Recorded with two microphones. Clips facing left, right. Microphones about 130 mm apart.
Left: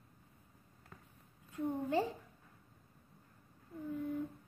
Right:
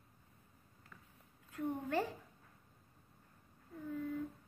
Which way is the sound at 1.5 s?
25° left (ahead or behind).